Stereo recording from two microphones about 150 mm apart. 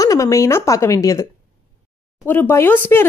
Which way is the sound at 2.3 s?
15° left (ahead or behind).